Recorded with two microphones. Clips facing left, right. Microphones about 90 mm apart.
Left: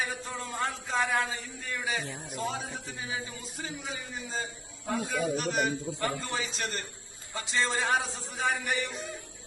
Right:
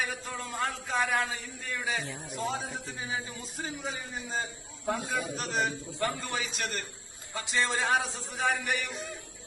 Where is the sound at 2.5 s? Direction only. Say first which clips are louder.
Right 1 dB; 15° right (ahead or behind).